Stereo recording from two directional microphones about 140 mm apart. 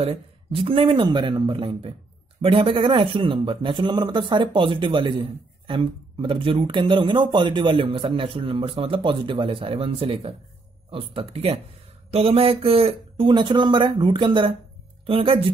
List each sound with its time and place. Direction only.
0.0 s speech: 40° right (ahead or behind)